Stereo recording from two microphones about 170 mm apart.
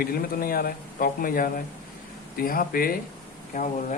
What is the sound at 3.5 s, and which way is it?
Speech, 45° left (ahead or behind).